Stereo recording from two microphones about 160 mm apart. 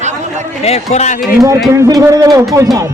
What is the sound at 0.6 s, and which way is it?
Speech, 40° left (ahead or behind).